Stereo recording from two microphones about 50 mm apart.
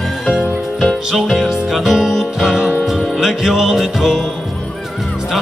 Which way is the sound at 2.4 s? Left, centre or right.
Right.